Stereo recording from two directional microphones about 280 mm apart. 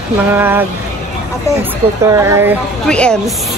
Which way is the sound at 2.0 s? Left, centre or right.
Centre.